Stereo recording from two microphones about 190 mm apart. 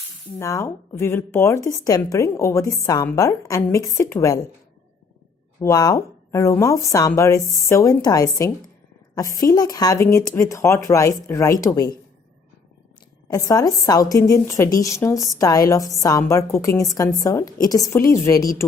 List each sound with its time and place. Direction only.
0.3 s speech: 15° left (ahead or behind)
5.5 s speech: 20° left (ahead or behind)
13.3 s a woman's voice: 20° left (ahead or behind)